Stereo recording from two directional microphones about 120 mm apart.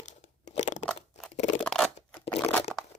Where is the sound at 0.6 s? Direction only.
80° left.